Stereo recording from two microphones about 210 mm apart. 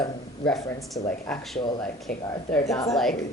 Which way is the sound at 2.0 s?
Centre (ahead or behind).